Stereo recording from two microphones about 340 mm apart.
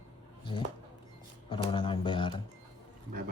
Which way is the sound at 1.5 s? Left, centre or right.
Centre.